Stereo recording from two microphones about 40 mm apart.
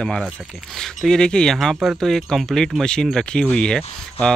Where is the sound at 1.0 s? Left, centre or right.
Centre.